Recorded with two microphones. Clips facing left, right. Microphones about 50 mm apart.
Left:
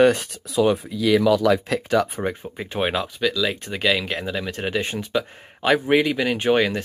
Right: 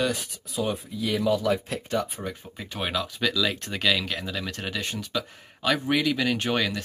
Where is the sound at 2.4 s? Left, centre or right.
Left.